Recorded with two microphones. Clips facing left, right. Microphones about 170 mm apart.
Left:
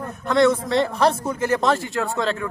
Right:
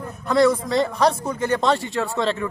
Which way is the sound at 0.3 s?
Centre (ahead or behind).